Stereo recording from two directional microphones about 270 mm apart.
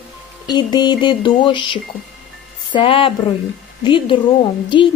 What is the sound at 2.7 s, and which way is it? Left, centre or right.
Speech, centre.